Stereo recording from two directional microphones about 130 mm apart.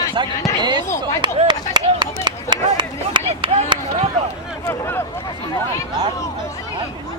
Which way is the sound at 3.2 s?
45° right (ahead or behind).